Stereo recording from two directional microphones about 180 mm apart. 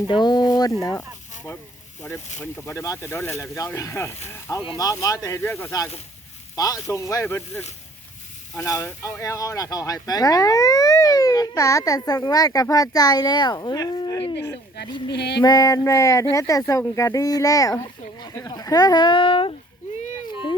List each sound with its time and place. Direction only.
0.1 s speech: 25° left (ahead or behind)
15.1 s female singing: 65° left (ahead or behind)
15.4 s speech: 20° left (ahead or behind)